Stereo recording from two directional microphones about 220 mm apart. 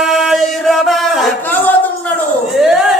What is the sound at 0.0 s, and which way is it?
Chant, centre (ahead or behind).